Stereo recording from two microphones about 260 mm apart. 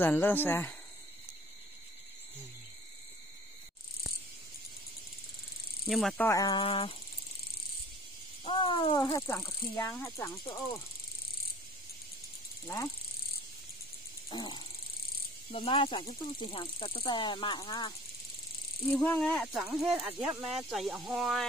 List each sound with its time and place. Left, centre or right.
0.0 s speech: centre
5.9 s speech: centre; by 7.0 s left
8.5 s speech: centre
12.6 s speech: centre
14.3 s speech: centre
18.9 s speech: centre